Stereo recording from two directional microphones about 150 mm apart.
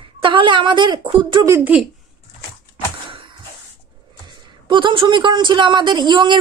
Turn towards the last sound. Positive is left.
turn(degrees=-30)  # may be behind; listen again after turning